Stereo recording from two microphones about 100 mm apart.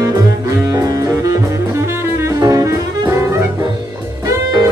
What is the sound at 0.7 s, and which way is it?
Saxophone, 35° right (ahead or behind).